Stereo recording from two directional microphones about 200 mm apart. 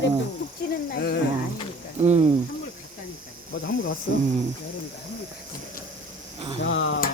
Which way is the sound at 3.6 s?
70° left (ahead or behind).